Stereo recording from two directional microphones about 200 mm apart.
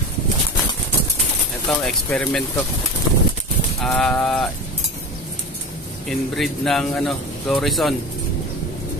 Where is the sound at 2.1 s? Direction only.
5° left (ahead or behind).